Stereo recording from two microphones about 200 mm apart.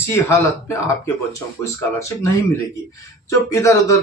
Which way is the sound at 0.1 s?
15° left (ahead or behind).